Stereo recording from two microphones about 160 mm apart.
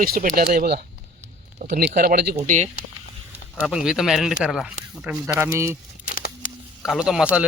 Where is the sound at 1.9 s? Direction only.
75° right (ahead or behind).